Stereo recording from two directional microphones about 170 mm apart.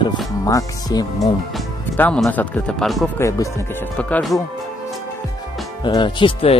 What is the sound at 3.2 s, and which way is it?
Speech, 15° left (ahead or behind).